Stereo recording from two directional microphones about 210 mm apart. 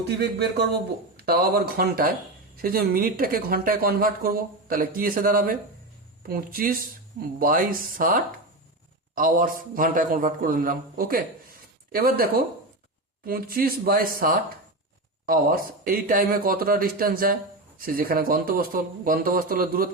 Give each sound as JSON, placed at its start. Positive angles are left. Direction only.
{"t": 0.2, "sound": "a man's voice", "side_deg": -50}